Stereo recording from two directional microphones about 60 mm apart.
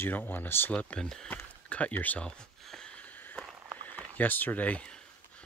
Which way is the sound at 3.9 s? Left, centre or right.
Left.